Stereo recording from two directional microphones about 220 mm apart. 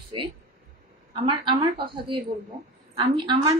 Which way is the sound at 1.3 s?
20° right (ahead or behind).